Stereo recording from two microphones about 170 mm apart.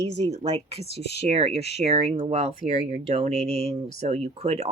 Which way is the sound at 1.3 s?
35° right (ahead or behind).